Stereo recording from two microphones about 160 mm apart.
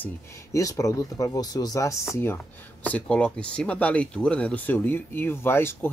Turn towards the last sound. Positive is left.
turn(degrees=15)  # may be behind; listen again after turning